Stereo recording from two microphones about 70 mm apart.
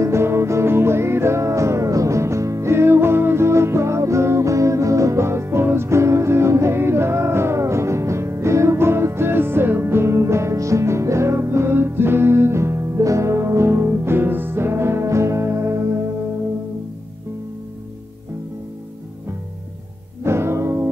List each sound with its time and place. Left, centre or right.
0.0 s music: right
20.2 s music: right